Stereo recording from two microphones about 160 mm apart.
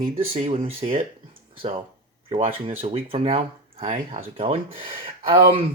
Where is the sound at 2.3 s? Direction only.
35° right (ahead or behind).